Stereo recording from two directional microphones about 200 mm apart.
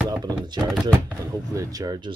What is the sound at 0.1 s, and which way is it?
Speech, 20° right (ahead or behind).